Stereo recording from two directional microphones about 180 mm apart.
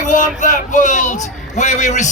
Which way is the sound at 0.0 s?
45° left (ahead or behind).